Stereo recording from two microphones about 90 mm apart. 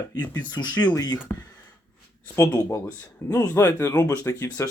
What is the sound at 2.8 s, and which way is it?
Speech, 20° left (ahead or behind).